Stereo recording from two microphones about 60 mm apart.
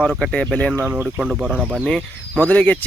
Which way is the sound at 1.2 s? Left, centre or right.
Centre.